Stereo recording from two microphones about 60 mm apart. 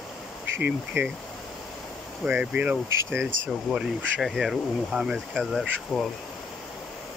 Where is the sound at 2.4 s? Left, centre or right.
Right.